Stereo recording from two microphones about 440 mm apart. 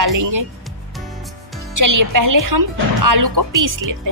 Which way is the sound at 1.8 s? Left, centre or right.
Right.